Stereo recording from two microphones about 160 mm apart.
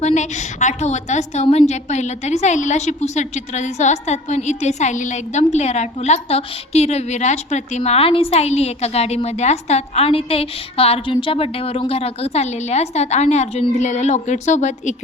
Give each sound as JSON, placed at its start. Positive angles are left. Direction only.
{"t": 0.0, "sound": "a woman's voice", "side_deg": 45}